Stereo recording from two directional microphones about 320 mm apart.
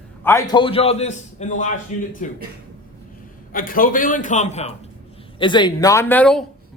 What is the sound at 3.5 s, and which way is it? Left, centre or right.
A man's voice, left.